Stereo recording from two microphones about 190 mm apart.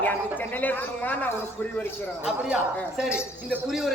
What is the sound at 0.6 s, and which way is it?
Speech, 10° left (ahead or behind).